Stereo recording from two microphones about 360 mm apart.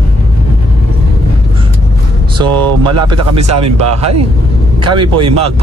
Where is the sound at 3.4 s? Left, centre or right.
Centre.